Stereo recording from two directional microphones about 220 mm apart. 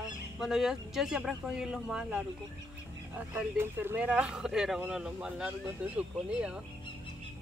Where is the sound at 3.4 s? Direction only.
10° right (ahead or behind).